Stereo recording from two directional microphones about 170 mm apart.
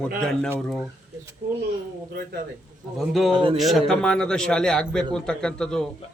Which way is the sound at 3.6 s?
Centre (ahead or behind).